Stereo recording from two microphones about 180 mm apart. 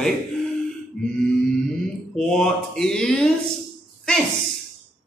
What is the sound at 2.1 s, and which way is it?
A man's voice, 5° left (ahead or behind).